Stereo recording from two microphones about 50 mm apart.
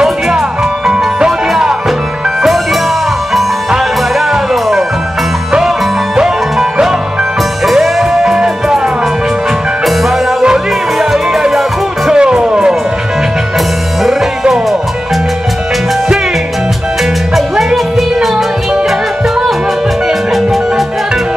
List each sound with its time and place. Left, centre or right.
2.4 s music: centre
4.3 s music: centre
6.1 s music: centre
10.4 s music: centre
12.1 s music: centre
14.4 s music: centre
17.6 s music: centre
20.1 s music: centre